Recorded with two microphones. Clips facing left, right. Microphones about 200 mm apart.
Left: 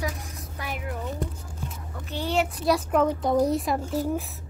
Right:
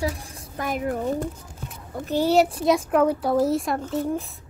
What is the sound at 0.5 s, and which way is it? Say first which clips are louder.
A child's voice: right 8 dB; 40° right (ahead or behind).